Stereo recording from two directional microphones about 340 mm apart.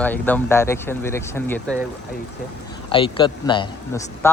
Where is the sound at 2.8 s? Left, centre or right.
Centre.